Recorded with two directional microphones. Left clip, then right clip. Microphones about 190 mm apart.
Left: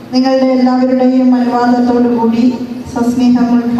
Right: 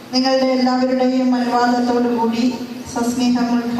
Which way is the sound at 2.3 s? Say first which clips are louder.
Left 7 dB; 5° left (ahead or behind).